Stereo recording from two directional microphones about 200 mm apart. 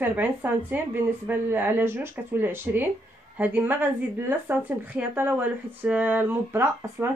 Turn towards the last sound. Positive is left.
turn(degrees=-10)  # may be behind; listen again after turning